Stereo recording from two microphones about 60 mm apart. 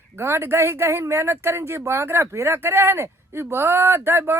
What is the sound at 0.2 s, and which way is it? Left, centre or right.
Speech, right.